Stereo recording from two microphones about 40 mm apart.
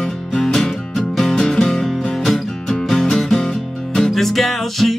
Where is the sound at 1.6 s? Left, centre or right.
Centre.